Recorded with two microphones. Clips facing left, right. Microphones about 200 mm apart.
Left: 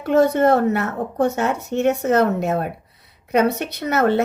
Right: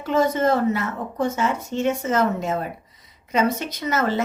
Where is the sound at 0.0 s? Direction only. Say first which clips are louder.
Left 4 dB; 65° left (ahead or behind).